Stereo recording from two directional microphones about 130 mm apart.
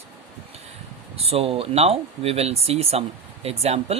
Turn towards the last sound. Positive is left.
turn(degrees=-50)  # may be behind; listen again after turning